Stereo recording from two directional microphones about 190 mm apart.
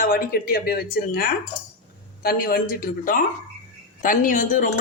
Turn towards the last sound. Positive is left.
turn(degrees=45)  # may be behind; listen again after turning